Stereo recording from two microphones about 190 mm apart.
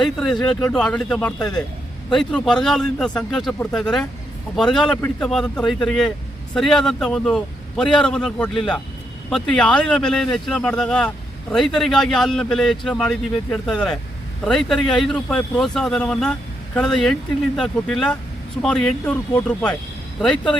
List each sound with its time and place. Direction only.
0.0 s speech: centre (ahead or behind)